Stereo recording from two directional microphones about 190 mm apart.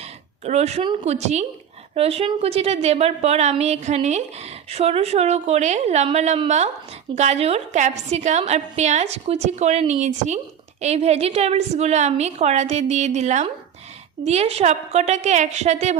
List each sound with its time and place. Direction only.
0.4 s a woman's voice: 35° right (ahead or behind)